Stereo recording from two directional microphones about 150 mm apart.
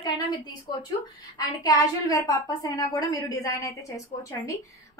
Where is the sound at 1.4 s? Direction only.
25° left (ahead or behind).